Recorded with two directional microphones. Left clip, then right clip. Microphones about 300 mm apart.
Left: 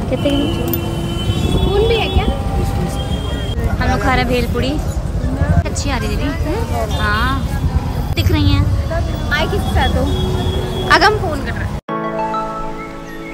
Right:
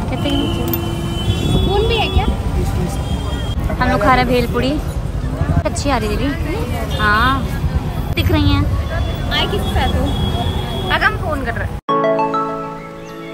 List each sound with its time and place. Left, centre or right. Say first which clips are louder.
0.1 s speech: left 3 dB; centre
3.8 s speech: right 3 dB; centre
10.9 s vehicle: left 5 dB; left